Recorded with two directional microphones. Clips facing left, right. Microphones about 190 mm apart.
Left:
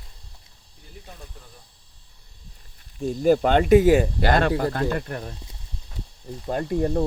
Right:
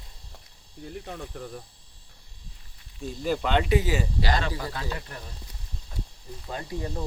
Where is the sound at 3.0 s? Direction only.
45° left (ahead or behind).